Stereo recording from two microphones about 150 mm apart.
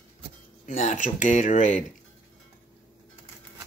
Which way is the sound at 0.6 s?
55° left (ahead or behind).